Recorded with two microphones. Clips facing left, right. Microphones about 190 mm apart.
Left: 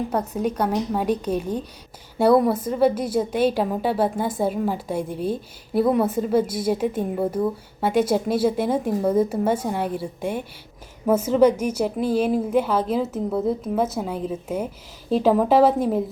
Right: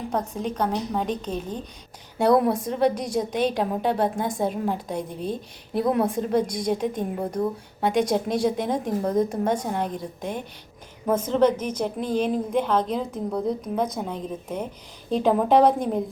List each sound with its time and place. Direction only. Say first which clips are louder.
0.1 s a woman's voice: left 3 dB; 10° left (ahead or behind)